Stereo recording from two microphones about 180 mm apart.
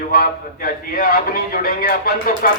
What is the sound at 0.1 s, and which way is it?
Speech, 55° left (ahead or behind).